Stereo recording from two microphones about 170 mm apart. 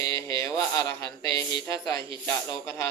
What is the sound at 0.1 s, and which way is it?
Speech, 20° left (ahead or behind).